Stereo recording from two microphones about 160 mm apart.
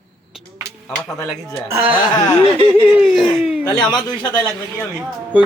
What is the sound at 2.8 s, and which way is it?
Speech, 10° right (ahead or behind).